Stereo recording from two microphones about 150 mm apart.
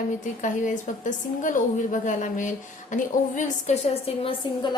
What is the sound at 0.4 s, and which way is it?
A woman's voice, 55° left (ahead or behind).